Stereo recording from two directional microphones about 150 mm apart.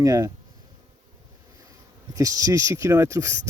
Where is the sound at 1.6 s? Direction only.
25° right (ahead or behind).